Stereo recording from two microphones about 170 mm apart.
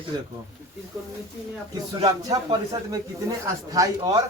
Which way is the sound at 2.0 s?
20° right (ahead or behind).